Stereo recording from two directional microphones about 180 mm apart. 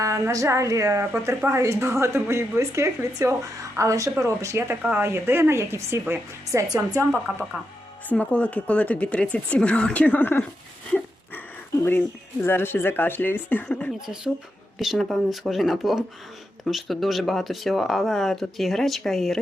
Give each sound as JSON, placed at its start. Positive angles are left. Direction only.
{"t": 0.0, "sound": "speech", "side_deg": -15}
{"t": 8.1, "sound": "speech", "side_deg": 5}
{"t": 11.8, "sound": "speech", "side_deg": 10}